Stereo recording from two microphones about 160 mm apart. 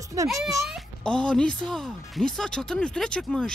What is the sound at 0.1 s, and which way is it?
Speech, 20° right (ahead or behind).